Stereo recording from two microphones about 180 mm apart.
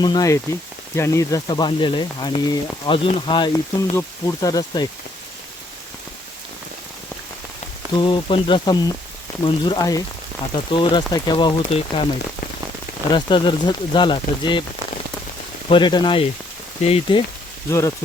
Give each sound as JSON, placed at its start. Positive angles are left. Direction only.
{"t": 0.0, "sound": "speech", "side_deg": 20}
{"t": 7.9, "sound": "speech", "side_deg": 30}
{"t": 13.1, "sound": "speech", "side_deg": 25}
{"t": 15.7, "sound": "speech", "side_deg": 25}
{"t": 17.7, "sound": "speech", "side_deg": 15}